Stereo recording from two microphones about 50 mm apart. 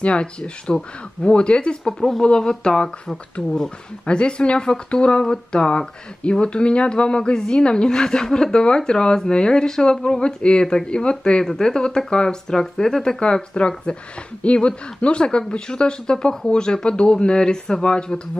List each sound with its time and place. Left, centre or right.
0.0 s speech: left
13.2 s speech: left